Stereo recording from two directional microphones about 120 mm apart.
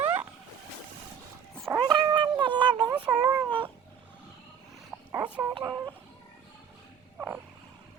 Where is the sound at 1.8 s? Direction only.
40° right (ahead or behind).